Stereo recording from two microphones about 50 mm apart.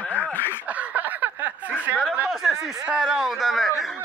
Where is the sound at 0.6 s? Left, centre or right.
Right.